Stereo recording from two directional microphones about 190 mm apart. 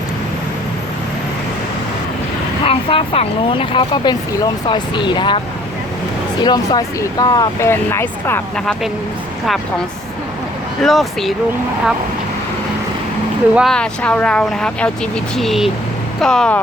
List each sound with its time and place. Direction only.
2.6 s speech: 30° left (ahead or behind)
6.4 s speech: 20° left (ahead or behind); by 8.9 s 5° left (ahead or behind)
10.8 s speech: centre (ahead or behind)
13.5 s speech: centre (ahead or behind)